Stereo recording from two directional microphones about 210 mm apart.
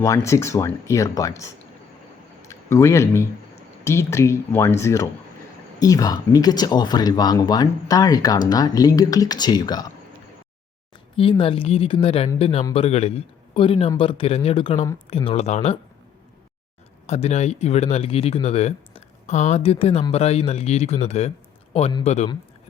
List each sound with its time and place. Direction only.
0.0 s speech: 15° left (ahead or behind)
2.5 s speech: 15° left (ahead or behind)
11.2 s a man's voice: 25° left (ahead or behind)
17.1 s speech: 30° left (ahead or behind)